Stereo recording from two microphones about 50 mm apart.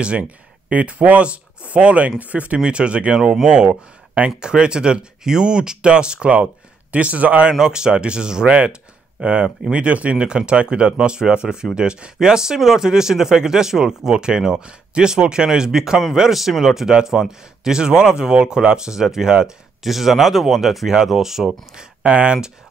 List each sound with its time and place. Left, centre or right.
0.0 s speech: right
7.5 s speech: centre
21.5 s speech: right